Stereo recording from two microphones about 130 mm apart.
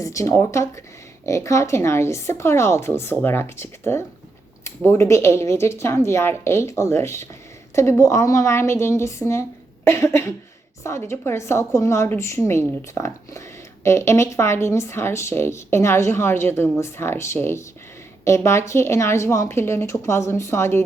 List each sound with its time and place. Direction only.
0.0 s speech: 25° left (ahead or behind)